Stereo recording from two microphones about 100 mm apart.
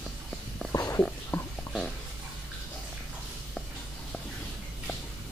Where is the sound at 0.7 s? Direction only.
30° left (ahead or behind).